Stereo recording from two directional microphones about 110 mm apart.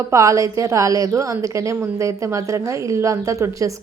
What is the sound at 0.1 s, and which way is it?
A woman's voice, 30° right (ahead or behind).